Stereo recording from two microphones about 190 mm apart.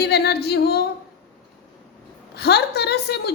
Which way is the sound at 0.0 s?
60° left (ahead or behind).